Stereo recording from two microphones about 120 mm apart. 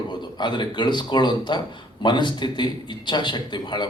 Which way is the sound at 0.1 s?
40° left (ahead or behind).